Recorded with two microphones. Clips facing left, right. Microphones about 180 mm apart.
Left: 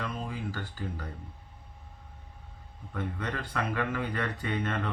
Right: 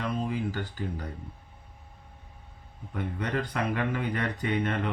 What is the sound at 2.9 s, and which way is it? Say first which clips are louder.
Speech: right 4 dB; 15° right (ahead or behind).